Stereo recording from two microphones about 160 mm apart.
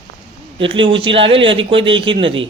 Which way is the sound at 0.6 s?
30° right (ahead or behind).